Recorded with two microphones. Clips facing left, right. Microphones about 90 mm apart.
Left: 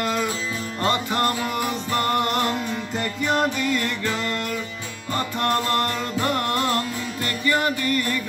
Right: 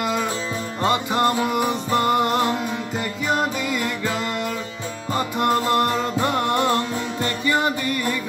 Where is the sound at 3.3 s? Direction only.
10° right (ahead or behind).